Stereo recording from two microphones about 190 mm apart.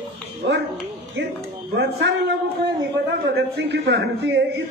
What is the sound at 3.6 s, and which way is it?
A man's voice, 65° right (ahead or behind).